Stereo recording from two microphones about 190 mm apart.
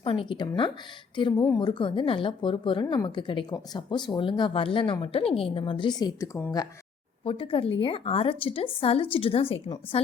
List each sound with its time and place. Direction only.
0.0 s speech: 30° left (ahead or behind)
7.3 s speech: 30° left (ahead or behind)